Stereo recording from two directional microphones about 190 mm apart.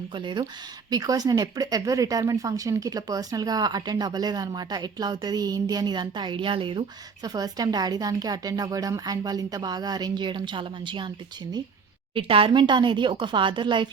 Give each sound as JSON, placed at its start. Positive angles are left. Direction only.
{"t": 0.1, "sound": "speech", "side_deg": -25}
{"t": 12.1, "sound": "speech", "side_deg": -30}